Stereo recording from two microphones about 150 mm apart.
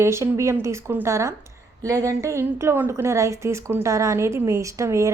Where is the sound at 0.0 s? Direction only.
20° right (ahead or behind).